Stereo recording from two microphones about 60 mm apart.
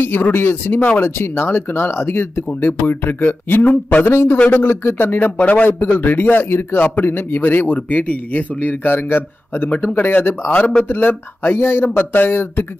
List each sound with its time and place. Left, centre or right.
0.0 s a man's voice: left
5.7 s a man's voice: left